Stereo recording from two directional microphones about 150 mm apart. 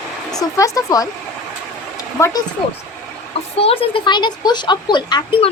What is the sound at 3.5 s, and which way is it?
Speech, 40° left (ahead or behind).